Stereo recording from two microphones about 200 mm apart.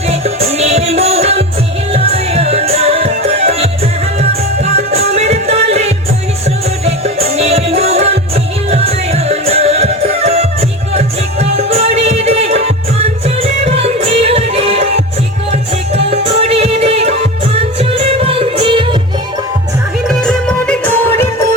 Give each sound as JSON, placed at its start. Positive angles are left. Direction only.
{"t": 0.1, "sound": "music", "side_deg": -30}
{"t": 16.0, "sound": "music", "side_deg": -30}
{"t": 20.1, "sound": "music", "side_deg": 5}